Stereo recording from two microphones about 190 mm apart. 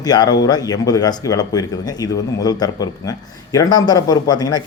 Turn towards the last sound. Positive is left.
turn(degrees=20)  # may be behind; listen again after turning